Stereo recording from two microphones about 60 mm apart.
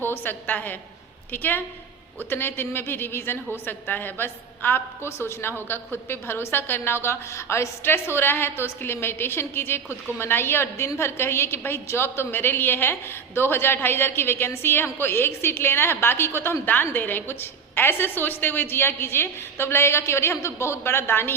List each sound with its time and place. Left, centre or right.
0.0 s a woman's voice: left